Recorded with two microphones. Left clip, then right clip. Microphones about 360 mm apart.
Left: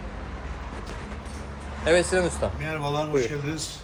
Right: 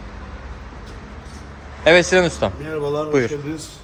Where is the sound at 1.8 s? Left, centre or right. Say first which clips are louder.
Right 8 dB; centre.